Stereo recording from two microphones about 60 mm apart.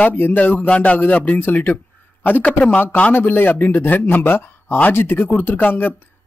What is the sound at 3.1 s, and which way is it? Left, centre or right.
Speech, left.